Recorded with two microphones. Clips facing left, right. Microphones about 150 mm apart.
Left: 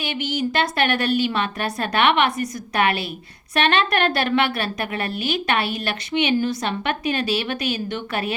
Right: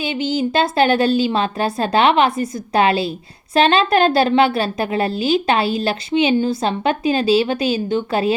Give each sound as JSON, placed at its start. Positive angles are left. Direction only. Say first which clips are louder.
{"t": 0.0, "sound": "a woman's voice", "louder": "right 5 dB", "side_deg": -25}